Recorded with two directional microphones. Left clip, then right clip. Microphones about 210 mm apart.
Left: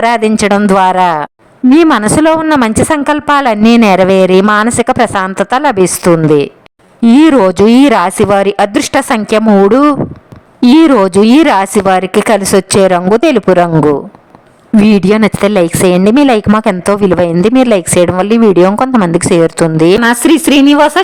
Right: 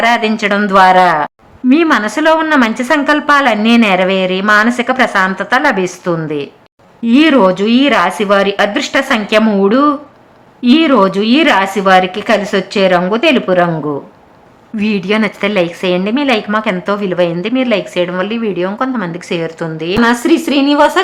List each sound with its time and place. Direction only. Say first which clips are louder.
0.0 s a woman's voice: left 2 dB; 45° left (ahead or behind)
14.8 s a woman's voice: left 6 dB; 45° left (ahead or behind)